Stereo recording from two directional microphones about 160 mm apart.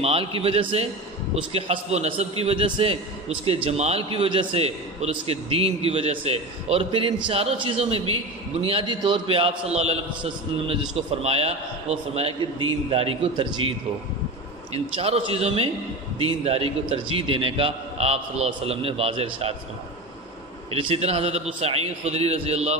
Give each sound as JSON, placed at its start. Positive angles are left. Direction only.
{"t": 0.0, "sound": "a man's voice", "side_deg": -35}
{"t": 14.7, "sound": "a man's voice", "side_deg": -40}
{"t": 20.7, "sound": "a man's voice", "side_deg": -35}